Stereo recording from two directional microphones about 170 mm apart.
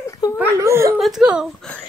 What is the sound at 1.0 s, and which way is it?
Speech, 5° right (ahead or behind).